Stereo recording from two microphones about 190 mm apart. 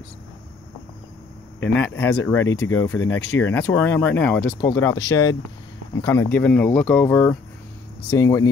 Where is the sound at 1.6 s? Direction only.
10° left (ahead or behind).